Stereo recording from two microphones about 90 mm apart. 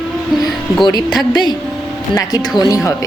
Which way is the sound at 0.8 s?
50° left (ahead or behind).